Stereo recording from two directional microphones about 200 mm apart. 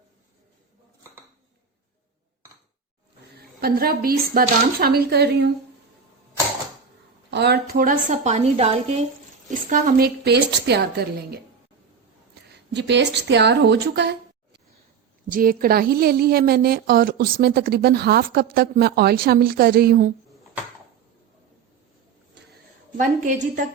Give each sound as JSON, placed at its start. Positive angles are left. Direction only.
{"t": 3.6, "sound": "a woman's voice", "side_deg": -50}
{"t": 7.3, "sound": "a woman's voice", "side_deg": -55}
{"t": 12.7, "sound": "speech", "side_deg": -60}
{"t": 15.3, "sound": "a woman's voice", "side_deg": -45}
{"t": 23.0, "sound": "a woman's voice", "side_deg": -40}